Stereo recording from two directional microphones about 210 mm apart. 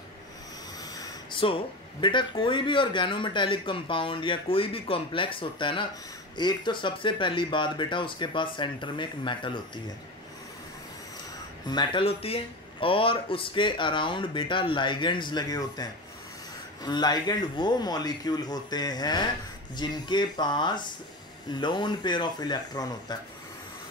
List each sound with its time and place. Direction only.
0.9 s speech: 20° left (ahead or behind)
11.7 s speech: 20° left (ahead or behind)